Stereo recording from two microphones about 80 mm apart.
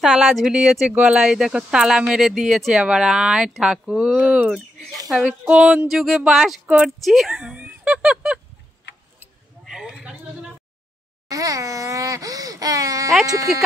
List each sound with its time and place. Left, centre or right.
0.0 s speech: centre
5.1 s speech: centre
5.5 s speech: centre
5.9 s speech: centre
7.3 s a sound: centre
9.7 s a sound: centre
11.2 s wail: right
13.5 s speech: centre